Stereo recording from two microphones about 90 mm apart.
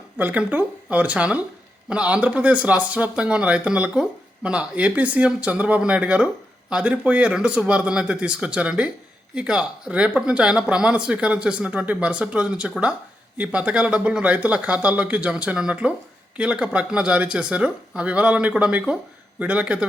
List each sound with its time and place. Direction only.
0.2 s speech: 15° right (ahead or behind)